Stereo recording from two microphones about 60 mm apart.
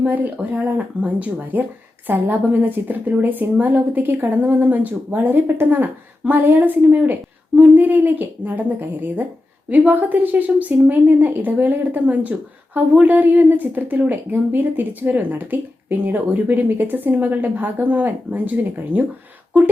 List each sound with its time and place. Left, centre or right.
0.0 s a woman's voice: right